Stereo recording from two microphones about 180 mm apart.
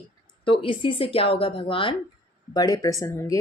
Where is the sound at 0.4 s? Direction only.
30° left (ahead or behind).